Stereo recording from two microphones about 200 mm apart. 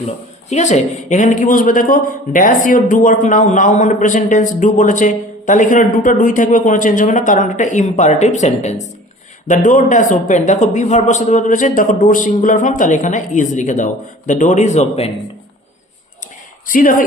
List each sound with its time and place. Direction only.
0.5 s a man's voice: 35° left (ahead or behind)
16.6 s speech: 40° left (ahead or behind)